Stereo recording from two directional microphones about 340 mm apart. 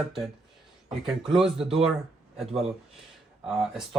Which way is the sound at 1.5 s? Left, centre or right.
Centre.